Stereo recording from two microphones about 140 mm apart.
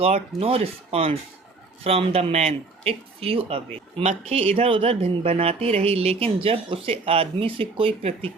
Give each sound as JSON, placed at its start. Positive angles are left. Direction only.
{"t": 0.0, "sound": "speech", "side_deg": -45}